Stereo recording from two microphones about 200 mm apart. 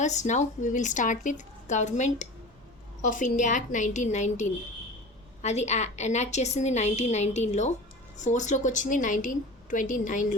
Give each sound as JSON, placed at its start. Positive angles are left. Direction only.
{"t": 0.0, "sound": "a woman's voice", "side_deg": 35}